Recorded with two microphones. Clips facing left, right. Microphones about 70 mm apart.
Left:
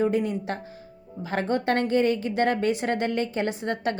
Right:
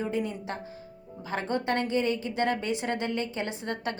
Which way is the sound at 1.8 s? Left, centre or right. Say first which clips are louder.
Left 5 dB; left.